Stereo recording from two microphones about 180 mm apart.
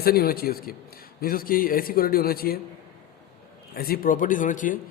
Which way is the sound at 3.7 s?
55° left (ahead or behind).